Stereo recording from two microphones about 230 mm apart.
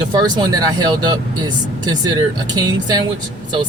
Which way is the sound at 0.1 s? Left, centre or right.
Centre.